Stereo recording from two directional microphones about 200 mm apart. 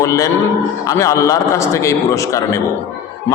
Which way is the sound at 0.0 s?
15° left (ahead or behind).